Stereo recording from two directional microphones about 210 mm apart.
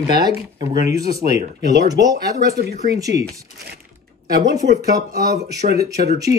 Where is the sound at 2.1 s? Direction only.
50° right (ahead or behind).